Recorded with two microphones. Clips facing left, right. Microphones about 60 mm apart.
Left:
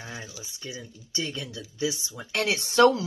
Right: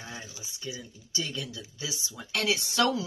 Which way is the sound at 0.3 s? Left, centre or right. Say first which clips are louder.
Left 3 dB; right.